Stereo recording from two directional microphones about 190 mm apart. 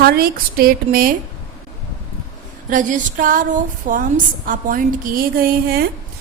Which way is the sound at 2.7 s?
45° right (ahead or behind).